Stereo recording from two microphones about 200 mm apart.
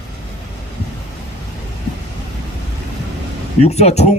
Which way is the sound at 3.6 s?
35° left (ahead or behind).